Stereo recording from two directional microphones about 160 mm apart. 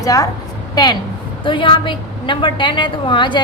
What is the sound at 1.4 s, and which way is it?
A woman's voice, 30° left (ahead or behind).